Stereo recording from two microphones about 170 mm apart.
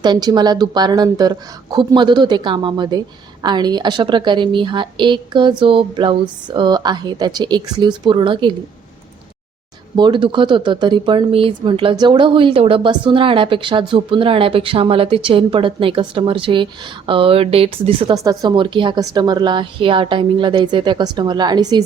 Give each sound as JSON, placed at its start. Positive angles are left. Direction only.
{"t": 0.0, "sound": "a woman's voice", "side_deg": -25}
{"t": 9.9, "sound": "speech", "side_deg": -25}
{"t": 18.1, "sound": "a woman's voice", "side_deg": -20}